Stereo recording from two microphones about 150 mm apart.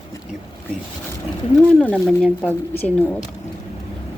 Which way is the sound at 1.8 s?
10° left (ahead or behind).